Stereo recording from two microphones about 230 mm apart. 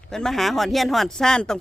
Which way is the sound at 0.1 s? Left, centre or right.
Centre.